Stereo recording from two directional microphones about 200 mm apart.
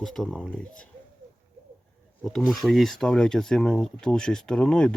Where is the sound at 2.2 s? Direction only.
Centre (ahead or behind).